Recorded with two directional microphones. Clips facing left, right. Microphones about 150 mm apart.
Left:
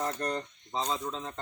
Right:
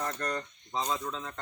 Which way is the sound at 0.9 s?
20° left (ahead or behind).